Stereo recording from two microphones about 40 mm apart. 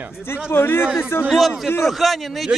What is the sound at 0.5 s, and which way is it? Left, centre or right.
Speech, left.